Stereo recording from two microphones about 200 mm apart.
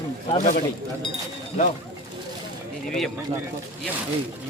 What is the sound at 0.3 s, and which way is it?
Speech, 40° left (ahead or behind).